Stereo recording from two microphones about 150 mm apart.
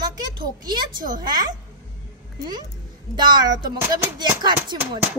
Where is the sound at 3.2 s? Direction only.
30° right (ahead or behind).